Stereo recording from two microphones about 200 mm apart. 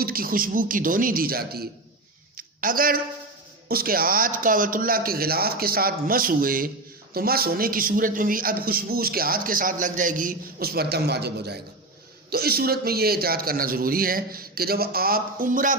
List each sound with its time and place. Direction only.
0.0 s a man's voice: 45° right (ahead or behind)
2.3 s a sound: 45° right (ahead or behind)
3.7 s a man's voice: 45° right (ahead or behind)